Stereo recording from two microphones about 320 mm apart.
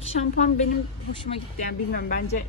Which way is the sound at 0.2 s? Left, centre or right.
Left.